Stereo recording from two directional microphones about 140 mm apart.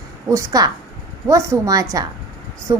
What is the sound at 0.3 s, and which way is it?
A woman's voice, 25° right (ahead or behind).